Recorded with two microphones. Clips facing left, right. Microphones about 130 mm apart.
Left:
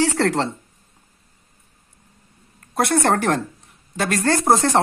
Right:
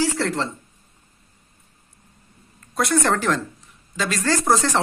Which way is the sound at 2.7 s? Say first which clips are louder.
Left 2 dB; 60° left (ahead or behind).